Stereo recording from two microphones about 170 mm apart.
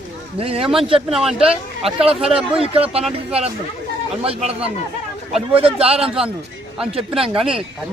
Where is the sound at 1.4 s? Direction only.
35° right (ahead or behind).